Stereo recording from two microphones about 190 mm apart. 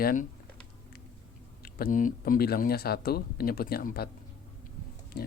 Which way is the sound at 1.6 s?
50° left (ahead or behind).